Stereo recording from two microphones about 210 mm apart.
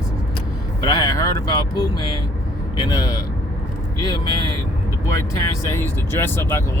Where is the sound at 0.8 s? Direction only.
20° left (ahead or behind).